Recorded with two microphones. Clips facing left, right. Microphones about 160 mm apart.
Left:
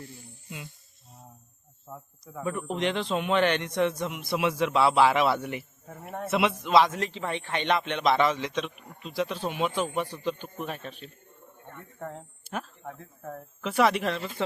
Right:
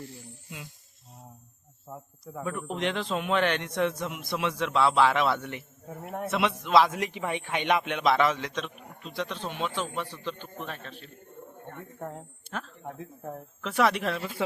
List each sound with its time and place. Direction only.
2.2 s a man's voice: centre (ahead or behind)
6.9 s a man's voice: 15° right (ahead or behind); by 11.1 s 15° left (ahead or behind)
11.9 s a man's voice: 5° right (ahead or behind)
12.5 s speech: 10° left (ahead or behind)
12.8 s speech: 20° right (ahead or behind)
13.6 s a man's voice: 5° left (ahead or behind)